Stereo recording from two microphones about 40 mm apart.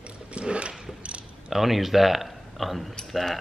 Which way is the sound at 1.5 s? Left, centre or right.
Centre.